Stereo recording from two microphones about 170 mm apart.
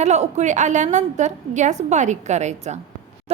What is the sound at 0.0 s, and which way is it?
A woman's voice, 40° right (ahead or behind).